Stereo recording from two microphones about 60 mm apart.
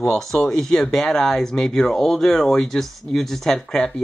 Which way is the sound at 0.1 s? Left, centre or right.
Centre.